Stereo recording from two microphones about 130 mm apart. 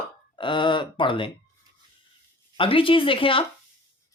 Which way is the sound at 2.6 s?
45° left (ahead or behind).